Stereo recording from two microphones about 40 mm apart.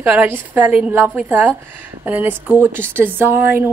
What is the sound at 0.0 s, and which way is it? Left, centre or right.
Speech, right.